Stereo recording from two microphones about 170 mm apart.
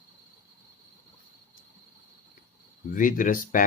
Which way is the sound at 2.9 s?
50° left (ahead or behind).